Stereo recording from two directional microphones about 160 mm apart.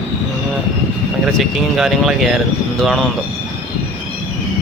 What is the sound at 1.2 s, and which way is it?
Speech, centre (ahead or behind).